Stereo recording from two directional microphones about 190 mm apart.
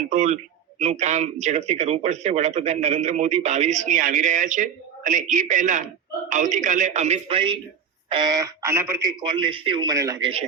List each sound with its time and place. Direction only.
0.1 s speech: 40° right (ahead or behind); by 10.3 s 15° right (ahead or behind)